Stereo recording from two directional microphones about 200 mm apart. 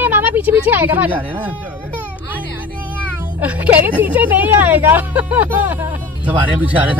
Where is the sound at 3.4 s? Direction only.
5° right (ahead or behind).